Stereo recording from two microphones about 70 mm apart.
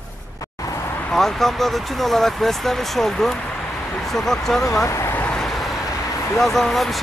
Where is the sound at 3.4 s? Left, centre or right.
Centre.